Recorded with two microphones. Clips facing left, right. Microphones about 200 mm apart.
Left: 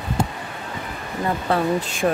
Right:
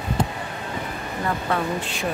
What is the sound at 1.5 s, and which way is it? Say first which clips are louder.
Speech: left 4 dB; 30° left (ahead or behind).